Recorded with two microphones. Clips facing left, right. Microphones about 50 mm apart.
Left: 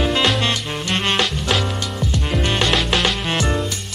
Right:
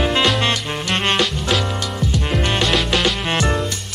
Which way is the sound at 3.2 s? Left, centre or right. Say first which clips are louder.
Right 1 dB; centre.